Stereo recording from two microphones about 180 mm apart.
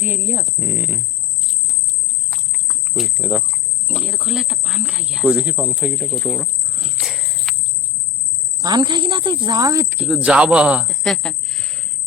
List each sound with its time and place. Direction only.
0.0 s speech: 10° right (ahead or behind)
2.3 s a sound: centre (ahead or behind)
3.8 s speech: 5° right (ahead or behind)
8.6 s speech: 25° right (ahead or behind); by 11.7 s 5° left (ahead or behind)